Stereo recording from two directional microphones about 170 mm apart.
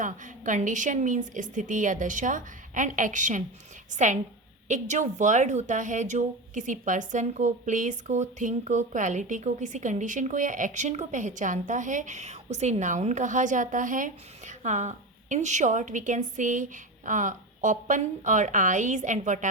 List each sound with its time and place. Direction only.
0.0 s speech: 50° right (ahead or behind)